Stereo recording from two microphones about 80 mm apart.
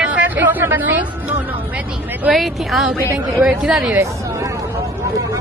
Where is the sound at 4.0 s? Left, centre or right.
Right.